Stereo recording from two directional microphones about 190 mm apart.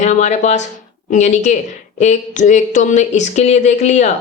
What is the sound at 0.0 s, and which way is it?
Speech, 40° left (ahead or behind).